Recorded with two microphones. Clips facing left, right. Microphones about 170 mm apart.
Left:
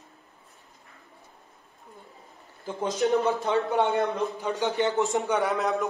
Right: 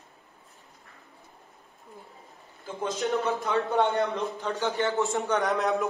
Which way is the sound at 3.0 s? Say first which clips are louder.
Left 4 dB; 20° left (ahead or behind).